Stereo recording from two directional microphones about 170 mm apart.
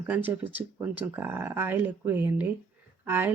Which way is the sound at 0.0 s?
10° right (ahead or behind).